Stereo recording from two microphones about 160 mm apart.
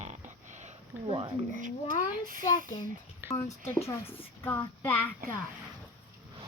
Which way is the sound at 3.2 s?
20° left (ahead or behind).